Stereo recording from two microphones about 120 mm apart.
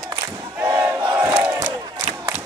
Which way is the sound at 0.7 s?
15° right (ahead or behind).